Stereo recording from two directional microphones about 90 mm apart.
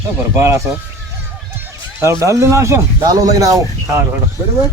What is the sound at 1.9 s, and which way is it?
Speech, 35° right (ahead or behind).